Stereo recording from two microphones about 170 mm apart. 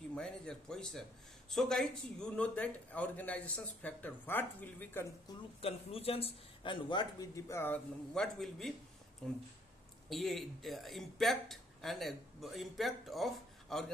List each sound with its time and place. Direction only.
0.1 s speech: 5° left (ahead or behind)
5.6 s a man's voice: 35° left (ahead or behind); by 13.8 s centre (ahead or behind)